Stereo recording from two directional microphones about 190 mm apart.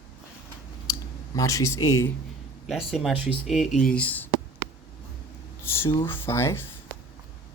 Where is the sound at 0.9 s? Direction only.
20° left (ahead or behind).